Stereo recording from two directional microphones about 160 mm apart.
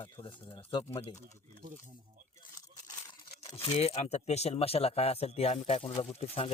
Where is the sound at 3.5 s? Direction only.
40° left (ahead or behind).